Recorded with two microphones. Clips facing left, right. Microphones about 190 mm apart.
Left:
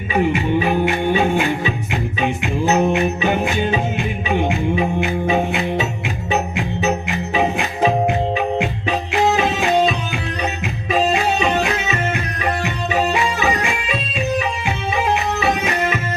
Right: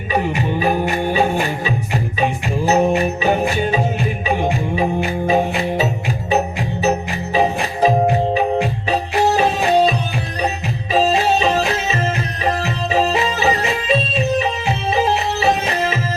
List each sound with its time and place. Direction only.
0.1 s music: 40° right (ahead or behind)
10.9 s music: 35° right (ahead or behind)